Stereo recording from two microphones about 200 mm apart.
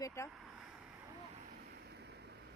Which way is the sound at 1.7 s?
55° right (ahead or behind).